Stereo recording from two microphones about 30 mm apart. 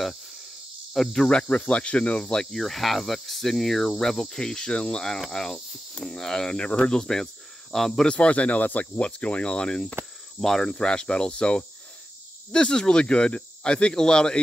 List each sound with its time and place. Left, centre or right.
1.0 s cricket: centre
1.7 s speech: left
2.5 s cricket: centre
4.0 s speech: centre
5.3 s speech: centre
6.5 s speech: left
6.9 s speech: centre
8.1 s speech: left
8.6 s speech: left
9.0 s speech: left
10.4 s speech: centre
10.8 s speech: left